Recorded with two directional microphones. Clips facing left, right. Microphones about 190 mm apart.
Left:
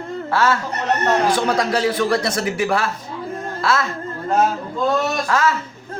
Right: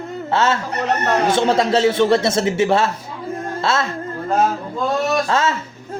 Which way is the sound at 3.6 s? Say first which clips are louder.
Even; 25° right (ahead or behind).